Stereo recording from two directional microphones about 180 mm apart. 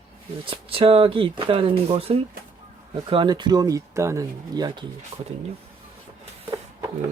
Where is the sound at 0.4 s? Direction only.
30° right (ahead or behind).